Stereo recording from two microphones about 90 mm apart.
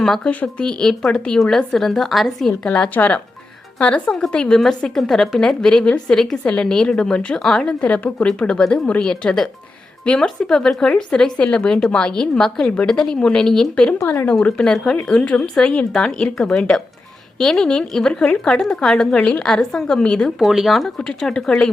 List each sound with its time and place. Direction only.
0.0 s a woman's voice: 10° left (ahead or behind)
14.0 s a woman's voice: 25° left (ahead or behind)
14.3 s a woman's voice: 10° left (ahead or behind)
20.4 s a woman's voice: 5° right (ahead or behind)